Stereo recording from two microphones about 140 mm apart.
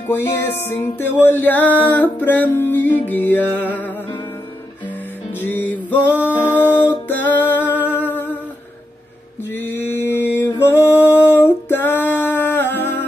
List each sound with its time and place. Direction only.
0.1 s music: 15° left (ahead or behind)
5.4 s music: 15° left (ahead or behind)
9.5 s music: 15° left (ahead or behind)